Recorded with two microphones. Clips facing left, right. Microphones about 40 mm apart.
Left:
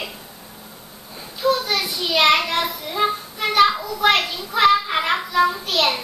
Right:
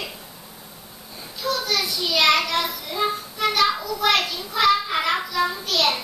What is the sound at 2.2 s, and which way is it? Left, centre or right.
Child singing, left.